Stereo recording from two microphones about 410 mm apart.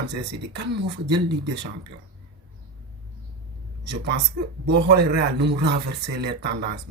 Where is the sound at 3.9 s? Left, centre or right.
Right.